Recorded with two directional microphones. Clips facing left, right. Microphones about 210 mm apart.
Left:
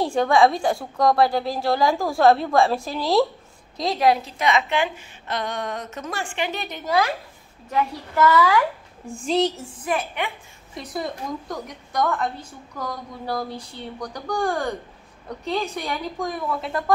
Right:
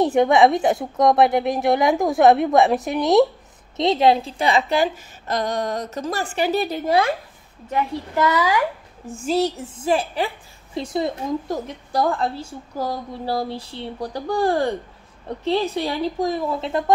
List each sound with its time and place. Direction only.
0.0 s a woman's voice: 20° right (ahead or behind)
9.0 s a woman's voice: 5° right (ahead or behind)
9.6 s a woman's voice: 25° right (ahead or behind)